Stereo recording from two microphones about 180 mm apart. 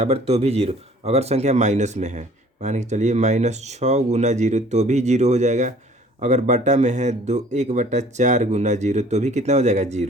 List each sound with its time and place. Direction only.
0.0 s speech: 35° right (ahead or behind)